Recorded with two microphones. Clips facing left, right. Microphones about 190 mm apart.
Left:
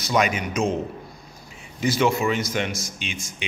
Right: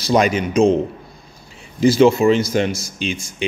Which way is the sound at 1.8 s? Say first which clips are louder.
Right 9 dB; 30° right (ahead or behind).